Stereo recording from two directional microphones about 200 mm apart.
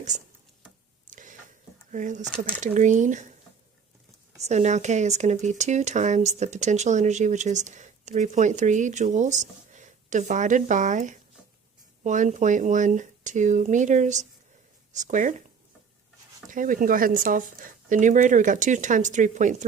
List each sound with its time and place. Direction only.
0.1 s speech: 35° right (ahead or behind)
1.0 s a sound: 40° right (ahead or behind)
1.9 s speech: 40° right (ahead or behind)
4.4 s speech: 35° right (ahead or behind)
16.5 s speech: 40° right (ahead or behind)